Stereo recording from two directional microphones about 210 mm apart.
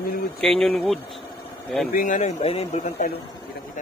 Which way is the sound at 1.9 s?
40° left (ahead or behind).